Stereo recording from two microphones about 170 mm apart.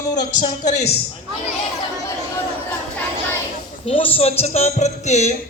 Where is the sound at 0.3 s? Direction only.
45° left (ahead or behind).